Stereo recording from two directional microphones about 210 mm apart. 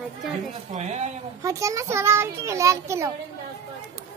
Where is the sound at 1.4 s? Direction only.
15° right (ahead or behind).